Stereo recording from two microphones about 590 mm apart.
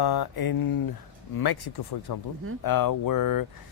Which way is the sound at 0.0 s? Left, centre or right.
Left.